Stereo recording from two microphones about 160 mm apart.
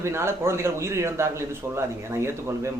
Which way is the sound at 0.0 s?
15° right (ahead or behind).